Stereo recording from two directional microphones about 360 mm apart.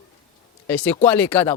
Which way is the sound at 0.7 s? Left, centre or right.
Centre.